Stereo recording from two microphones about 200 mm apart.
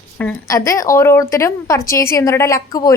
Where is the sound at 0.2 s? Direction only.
10° left (ahead or behind).